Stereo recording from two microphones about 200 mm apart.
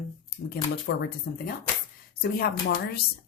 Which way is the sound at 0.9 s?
60° left (ahead or behind).